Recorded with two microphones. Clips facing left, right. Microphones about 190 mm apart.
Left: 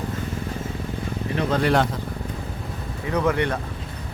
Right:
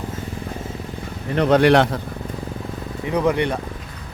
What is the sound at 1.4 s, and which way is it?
Speech, 70° right (ahead or behind).